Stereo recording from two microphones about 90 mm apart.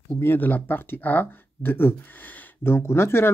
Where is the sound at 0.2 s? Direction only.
25° left (ahead or behind).